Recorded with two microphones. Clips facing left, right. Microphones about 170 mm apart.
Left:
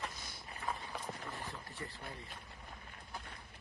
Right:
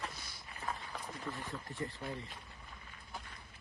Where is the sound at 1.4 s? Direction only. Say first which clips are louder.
Right 4 dB; 35° left (ahead or behind).